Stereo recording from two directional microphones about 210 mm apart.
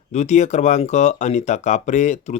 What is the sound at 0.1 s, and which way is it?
Speech, 35° left (ahead or behind).